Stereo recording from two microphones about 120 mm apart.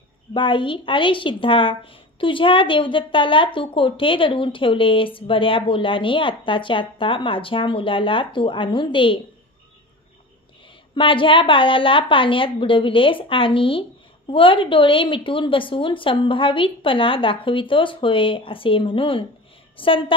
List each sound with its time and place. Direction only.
0.3 s a woman's voice: 45° left (ahead or behind)
11.0 s a woman's voice: 45° left (ahead or behind)